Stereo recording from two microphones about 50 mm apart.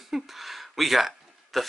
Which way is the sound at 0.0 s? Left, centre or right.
Centre.